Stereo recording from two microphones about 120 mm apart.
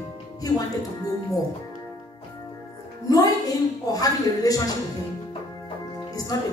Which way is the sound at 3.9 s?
30° left (ahead or behind).